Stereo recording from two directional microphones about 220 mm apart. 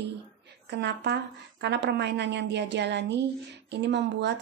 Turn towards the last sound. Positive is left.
turn(degrees=-50)  # may be behind; listen again after turning